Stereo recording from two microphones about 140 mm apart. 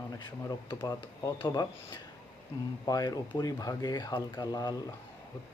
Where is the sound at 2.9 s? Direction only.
25° left (ahead or behind).